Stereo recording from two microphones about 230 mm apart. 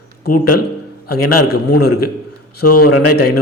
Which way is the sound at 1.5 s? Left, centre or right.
Left.